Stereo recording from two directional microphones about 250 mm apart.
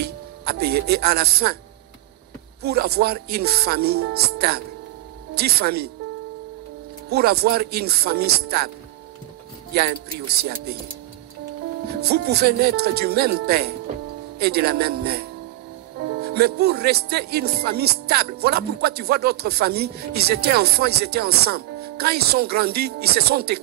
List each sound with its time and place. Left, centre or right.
0.0 s speech: right
2.6 s speech: right
7.1 s speech: right
9.7 s speech: right
11.9 s speech: right